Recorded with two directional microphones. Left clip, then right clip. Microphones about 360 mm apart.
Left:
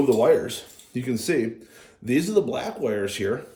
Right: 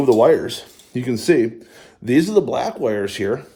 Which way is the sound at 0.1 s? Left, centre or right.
Centre.